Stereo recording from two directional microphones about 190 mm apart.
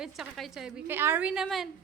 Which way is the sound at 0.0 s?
Centre (ahead or behind).